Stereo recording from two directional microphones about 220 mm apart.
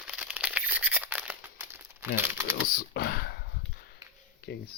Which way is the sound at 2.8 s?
45° left (ahead or behind).